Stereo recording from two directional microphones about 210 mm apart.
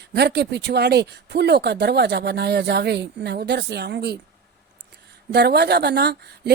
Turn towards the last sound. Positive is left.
turn(degrees=-50)  # may be behind; listen again after turning